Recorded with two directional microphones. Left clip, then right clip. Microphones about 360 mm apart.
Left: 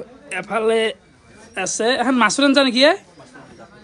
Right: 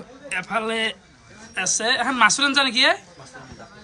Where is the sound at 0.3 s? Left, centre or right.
Centre.